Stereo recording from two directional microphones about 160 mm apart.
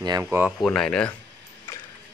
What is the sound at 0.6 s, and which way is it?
Speech, 5° left (ahead or behind).